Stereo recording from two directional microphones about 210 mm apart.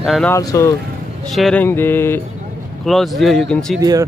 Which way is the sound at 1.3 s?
5° left (ahead or behind).